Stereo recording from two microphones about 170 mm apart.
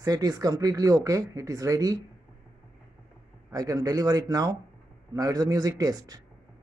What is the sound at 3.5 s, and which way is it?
Speech, 20° right (ahead or behind).